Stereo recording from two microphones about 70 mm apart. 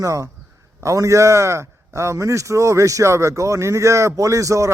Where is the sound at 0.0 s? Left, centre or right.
Right.